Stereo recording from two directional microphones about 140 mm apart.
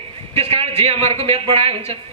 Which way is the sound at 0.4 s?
45° right (ahead or behind).